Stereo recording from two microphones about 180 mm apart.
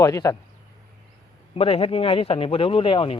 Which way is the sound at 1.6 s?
30° left (ahead or behind).